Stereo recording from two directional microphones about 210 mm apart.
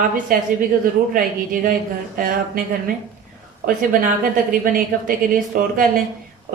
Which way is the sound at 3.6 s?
40° right (ahead or behind).